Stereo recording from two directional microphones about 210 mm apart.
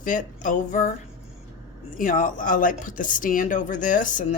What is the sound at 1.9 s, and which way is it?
Speech, 40° left (ahead or behind).